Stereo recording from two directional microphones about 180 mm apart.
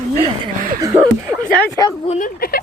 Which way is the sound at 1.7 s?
20° left (ahead or behind).